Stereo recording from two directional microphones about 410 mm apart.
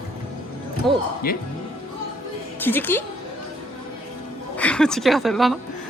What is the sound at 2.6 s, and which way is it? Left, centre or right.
Speech, centre.